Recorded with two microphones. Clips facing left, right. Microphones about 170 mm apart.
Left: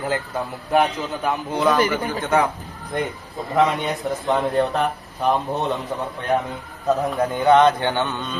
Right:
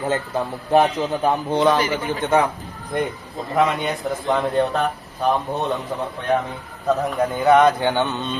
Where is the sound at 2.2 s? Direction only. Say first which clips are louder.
Right 2 dB; 20° right (ahead or behind).